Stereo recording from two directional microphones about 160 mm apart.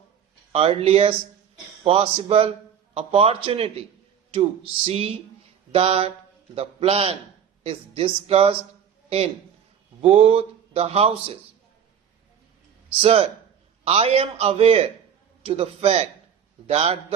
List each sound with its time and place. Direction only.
0.5 s speech: 35° right (ahead or behind)
4.9 s a man's voice: 35° right (ahead or behind)
13.0 s speech: 35° right (ahead or behind)